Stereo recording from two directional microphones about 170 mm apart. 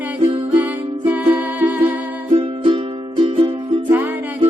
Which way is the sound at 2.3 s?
30° right (ahead or behind).